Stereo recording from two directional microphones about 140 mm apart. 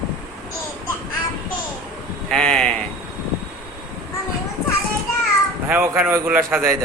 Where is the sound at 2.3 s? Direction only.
5° left (ahead or behind).